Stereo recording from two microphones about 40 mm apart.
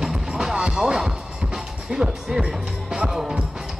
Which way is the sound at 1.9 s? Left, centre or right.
Centre.